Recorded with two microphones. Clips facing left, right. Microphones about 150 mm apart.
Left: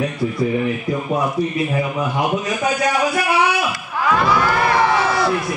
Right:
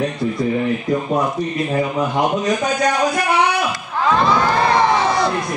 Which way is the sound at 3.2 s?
5° left (ahead or behind).